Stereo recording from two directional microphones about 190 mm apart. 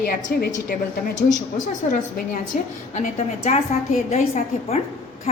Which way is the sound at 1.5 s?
45° left (ahead or behind).